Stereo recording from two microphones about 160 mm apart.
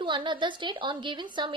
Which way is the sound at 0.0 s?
30° right (ahead or behind).